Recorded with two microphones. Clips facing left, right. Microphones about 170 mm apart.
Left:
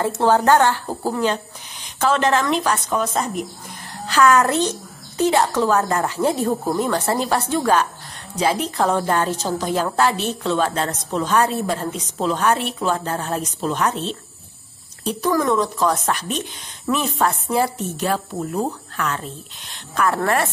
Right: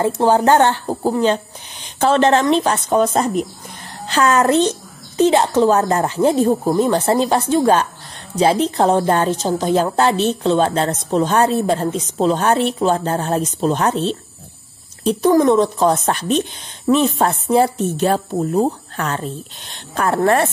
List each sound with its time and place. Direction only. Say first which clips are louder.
0.0 s speech: right 3 dB; 20° right (ahead or behind)
4.1 s a woman's voice: right 1 dB; 25° right (ahead or behind)